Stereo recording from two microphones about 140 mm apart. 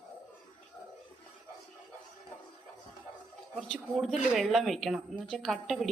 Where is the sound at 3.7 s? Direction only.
Centre (ahead or behind).